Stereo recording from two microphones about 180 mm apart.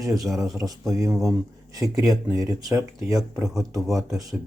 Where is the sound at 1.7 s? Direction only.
20° right (ahead or behind).